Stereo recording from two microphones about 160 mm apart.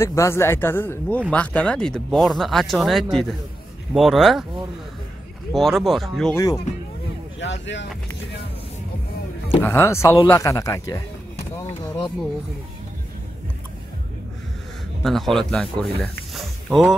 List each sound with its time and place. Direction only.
0.0 s speech: 15° left (ahead or behind); by 4.5 s centre (ahead or behind)
5.5 s speech: centre (ahead or behind)
6.3 s speech: 20° left (ahead or behind)
9.6 s speech: 15° left (ahead or behind)
15.0 s speech: centre (ahead or behind)